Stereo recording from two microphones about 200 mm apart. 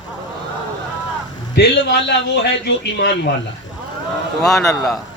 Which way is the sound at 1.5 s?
60° left (ahead or behind).